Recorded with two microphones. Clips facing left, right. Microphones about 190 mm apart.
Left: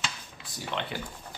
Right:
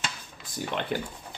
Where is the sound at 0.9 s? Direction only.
50° right (ahead or behind).